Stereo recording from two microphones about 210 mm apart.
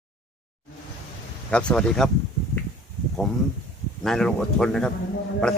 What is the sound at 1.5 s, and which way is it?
Speech, 5° left (ahead or behind).